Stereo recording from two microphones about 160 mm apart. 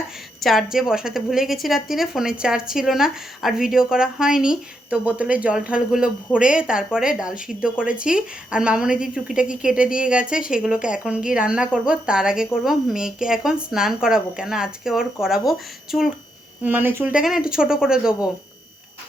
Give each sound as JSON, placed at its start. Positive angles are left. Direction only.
{"t": 0.4, "sound": "a woman's voice", "side_deg": 0}